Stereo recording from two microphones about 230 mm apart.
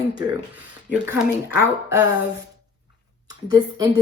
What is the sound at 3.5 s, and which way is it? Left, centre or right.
Speech, centre.